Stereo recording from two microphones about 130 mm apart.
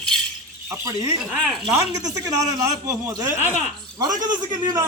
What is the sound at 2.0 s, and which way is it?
Speech, 25° right (ahead or behind).